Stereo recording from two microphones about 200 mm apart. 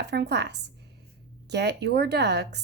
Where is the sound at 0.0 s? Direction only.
55° right (ahead or behind).